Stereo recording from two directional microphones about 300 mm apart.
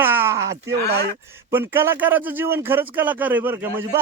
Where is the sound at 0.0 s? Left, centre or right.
Centre.